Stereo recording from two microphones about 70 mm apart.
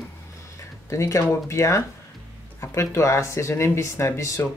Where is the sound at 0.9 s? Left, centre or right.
Left.